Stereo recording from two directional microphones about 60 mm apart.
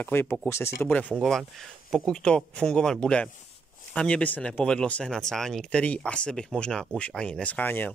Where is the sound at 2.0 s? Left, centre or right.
Centre.